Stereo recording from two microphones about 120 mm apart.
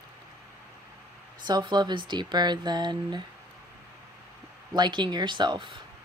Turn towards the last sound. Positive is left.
turn(degrees=-40)  # may be behind; listen again after turning